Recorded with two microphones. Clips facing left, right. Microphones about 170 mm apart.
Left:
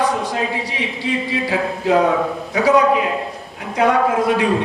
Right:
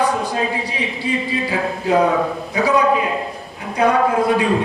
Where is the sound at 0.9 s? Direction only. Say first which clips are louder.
Left 1 dB; 75° left (ahead or behind).